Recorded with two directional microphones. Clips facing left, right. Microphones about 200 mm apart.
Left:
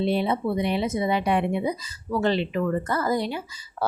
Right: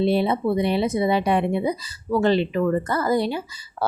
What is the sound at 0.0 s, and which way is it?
Speech, 35° right (ahead or behind).